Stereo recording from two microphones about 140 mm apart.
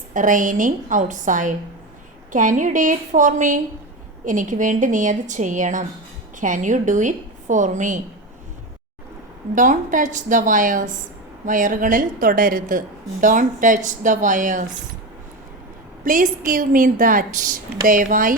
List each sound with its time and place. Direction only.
0.1 s a woman's voice: 70° right (ahead or behind)
9.6 s a woman's voice: 70° right (ahead or behind)
13.2 s a woman's voice: 70° right (ahead or behind)
16.0 s a woman's voice: 80° right